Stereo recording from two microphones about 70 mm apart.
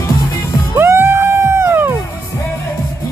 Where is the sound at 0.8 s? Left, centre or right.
Right.